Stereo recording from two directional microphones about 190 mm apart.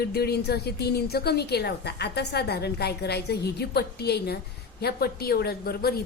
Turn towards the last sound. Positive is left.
turn(degrees=55)  # may be behind; listen again after turning